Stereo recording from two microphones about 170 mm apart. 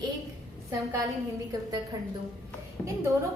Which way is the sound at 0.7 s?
20° right (ahead or behind).